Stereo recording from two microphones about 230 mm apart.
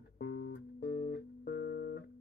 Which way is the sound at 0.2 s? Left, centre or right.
Left.